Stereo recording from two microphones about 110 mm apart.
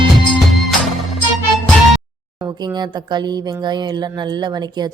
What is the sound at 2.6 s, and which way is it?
A woman's voice, 40° right (ahead or behind).